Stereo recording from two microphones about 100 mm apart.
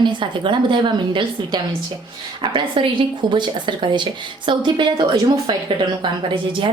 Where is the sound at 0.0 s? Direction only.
50° right (ahead or behind).